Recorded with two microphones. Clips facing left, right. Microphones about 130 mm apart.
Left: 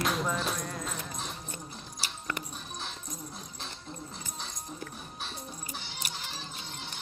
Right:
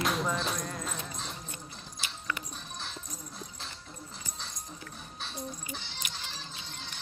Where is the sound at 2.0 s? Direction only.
45° left (ahead or behind).